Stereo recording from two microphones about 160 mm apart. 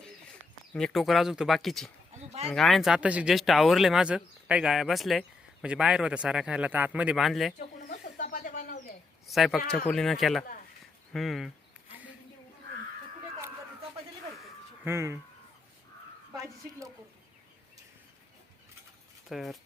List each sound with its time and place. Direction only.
0.7 s speech: 5° left (ahead or behind)
2.1 s a sound: 45° right (ahead or behind)
2.5 s speech: centre (ahead or behind)
7.9 s bird: 55° left (ahead or behind)
9.2 s speech: centre (ahead or behind)
14.8 s speech: 15° right (ahead or behind)
19.3 s speech: centre (ahead or behind)